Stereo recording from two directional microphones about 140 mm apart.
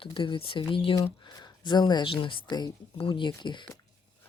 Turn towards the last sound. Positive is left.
turn(degrees=35)  # may be behind; listen again after turning